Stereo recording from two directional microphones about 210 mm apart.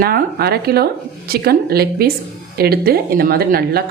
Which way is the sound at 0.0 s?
45° right (ahead or behind).